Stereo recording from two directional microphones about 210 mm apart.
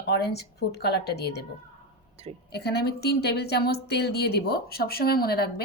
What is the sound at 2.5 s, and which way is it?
A woman's voice, 50° left (ahead or behind).